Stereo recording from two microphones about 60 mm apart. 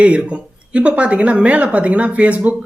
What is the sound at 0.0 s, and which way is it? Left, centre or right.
Speech, centre.